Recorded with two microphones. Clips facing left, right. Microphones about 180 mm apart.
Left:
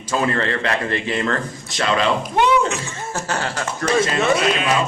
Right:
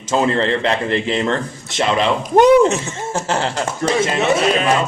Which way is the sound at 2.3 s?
45° right (ahead or behind).